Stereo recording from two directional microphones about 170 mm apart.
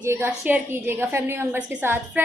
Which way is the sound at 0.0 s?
15° right (ahead or behind).